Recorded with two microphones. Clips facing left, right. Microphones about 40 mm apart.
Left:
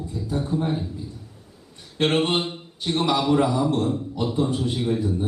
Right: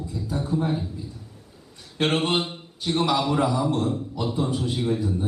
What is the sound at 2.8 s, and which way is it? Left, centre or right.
A man's voice, centre.